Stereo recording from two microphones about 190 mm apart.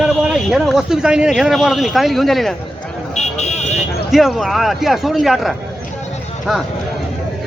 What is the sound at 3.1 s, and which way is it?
Vehicle, 35° left (ahead or behind).